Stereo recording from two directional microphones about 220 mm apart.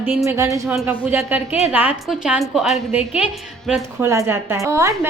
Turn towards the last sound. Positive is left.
turn(degrees=-15)  # may be behind; listen again after turning